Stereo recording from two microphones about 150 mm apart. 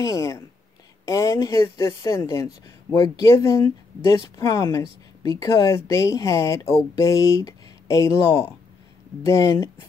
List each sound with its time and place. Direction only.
0.0 s speech: 20° left (ahead or behind)